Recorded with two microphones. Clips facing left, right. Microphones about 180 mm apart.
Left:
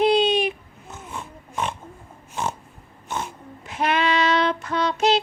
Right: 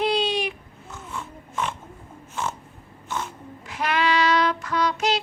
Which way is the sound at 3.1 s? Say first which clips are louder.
Left 1 dB; 20° left (ahead or behind).